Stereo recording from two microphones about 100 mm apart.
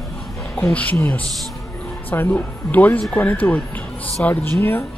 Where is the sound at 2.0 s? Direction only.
20° left (ahead or behind).